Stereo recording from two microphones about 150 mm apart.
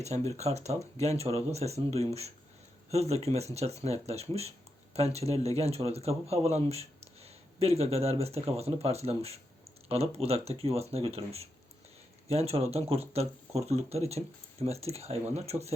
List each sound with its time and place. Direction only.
0.0 s speech: 45° right (ahead or behind)